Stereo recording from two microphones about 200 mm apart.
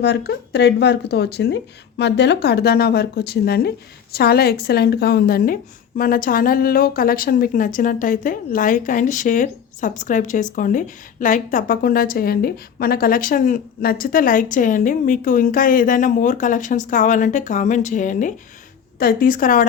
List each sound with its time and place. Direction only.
0.0 s a woman's voice: 55° left (ahead or behind)